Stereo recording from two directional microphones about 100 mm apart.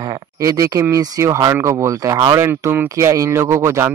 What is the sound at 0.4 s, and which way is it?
Speech, 30° right (ahead or behind).